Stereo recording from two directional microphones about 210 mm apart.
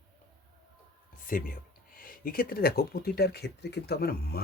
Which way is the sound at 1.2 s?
40° left (ahead or behind).